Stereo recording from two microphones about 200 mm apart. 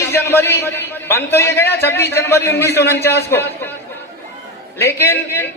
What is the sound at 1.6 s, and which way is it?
Speech, 55° left (ahead or behind).